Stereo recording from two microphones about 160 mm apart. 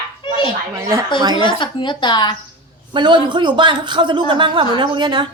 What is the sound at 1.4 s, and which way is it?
Speech, 30° left (ahead or behind).